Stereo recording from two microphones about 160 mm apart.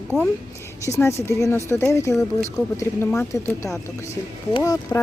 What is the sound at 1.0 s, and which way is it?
Speech, 15° left (ahead or behind).